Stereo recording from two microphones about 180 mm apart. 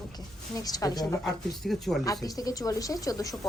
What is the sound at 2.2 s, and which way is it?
Speech, 20° left (ahead or behind).